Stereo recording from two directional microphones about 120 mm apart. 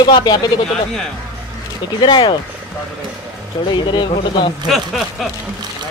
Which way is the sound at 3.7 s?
40° left (ahead or behind).